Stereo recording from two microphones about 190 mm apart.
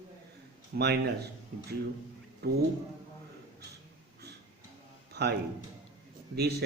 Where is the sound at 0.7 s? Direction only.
60° right (ahead or behind).